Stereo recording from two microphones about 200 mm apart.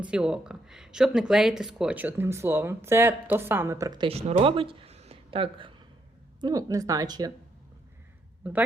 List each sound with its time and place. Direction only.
0.0 s speech: 5° right (ahead or behind)
8.4 s speech: 10° right (ahead or behind)